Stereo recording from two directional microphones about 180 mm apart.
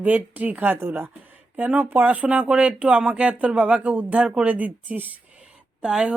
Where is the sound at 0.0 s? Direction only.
10° right (ahead or behind).